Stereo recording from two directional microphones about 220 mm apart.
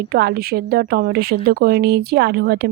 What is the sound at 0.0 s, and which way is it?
Speech, 45° right (ahead or behind).